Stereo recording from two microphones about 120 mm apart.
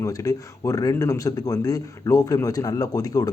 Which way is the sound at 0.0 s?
30° left (ahead or behind).